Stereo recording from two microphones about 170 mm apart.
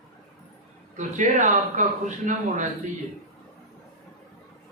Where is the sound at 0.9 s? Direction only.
45° right (ahead or behind).